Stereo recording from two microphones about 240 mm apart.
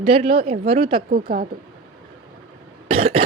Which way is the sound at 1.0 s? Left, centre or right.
Right.